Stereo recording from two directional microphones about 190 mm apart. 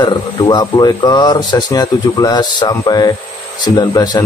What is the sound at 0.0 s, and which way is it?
Speech, 25° left (ahead or behind).